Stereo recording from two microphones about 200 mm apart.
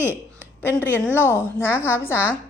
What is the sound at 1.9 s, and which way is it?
Speech, 15° left (ahead or behind).